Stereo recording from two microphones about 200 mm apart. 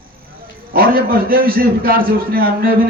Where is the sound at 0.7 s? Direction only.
45° right (ahead or behind).